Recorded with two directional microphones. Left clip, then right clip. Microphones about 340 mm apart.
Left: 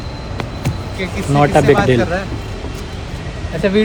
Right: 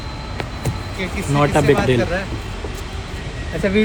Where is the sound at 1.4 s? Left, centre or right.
Centre.